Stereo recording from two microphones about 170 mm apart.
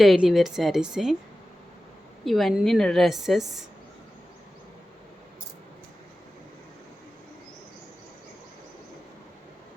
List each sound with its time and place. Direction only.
0.0 s a woman's voice: centre (ahead or behind)
2.2 s a woman's voice: centre (ahead or behind)